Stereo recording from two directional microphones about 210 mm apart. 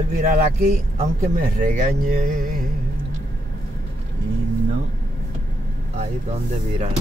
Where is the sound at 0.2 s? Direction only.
45° right (ahead or behind).